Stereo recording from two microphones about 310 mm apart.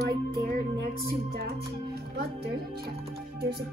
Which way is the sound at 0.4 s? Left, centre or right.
Right.